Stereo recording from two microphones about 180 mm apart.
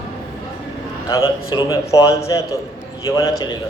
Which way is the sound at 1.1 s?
15° left (ahead or behind).